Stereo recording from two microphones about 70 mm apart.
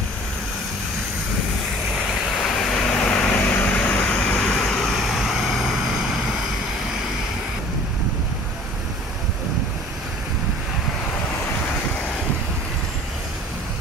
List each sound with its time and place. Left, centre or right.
2.4 s vehicle: centre